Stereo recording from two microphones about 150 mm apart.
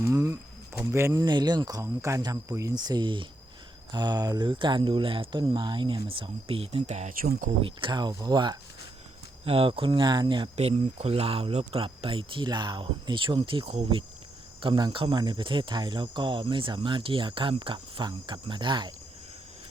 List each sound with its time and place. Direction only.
0.0 s speech: 20° right (ahead or behind); by 7.3 s 50° right (ahead or behind)
7.3 s speech: 65° right (ahead or behind)
7.6 s speech: 35° right (ahead or behind)
9.4 s speech: 40° right (ahead or behind)
10.6 s speech: 45° right (ahead or behind)